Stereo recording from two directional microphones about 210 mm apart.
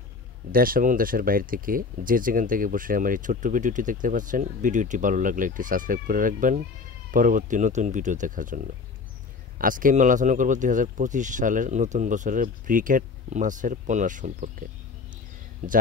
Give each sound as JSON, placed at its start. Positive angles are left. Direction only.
{"t": 0.5, "sound": "speech", "side_deg": -45}
{"t": 15.6, "sound": "speech", "side_deg": -40}